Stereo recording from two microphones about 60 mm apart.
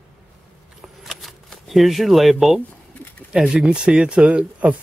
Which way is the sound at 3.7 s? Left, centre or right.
Centre.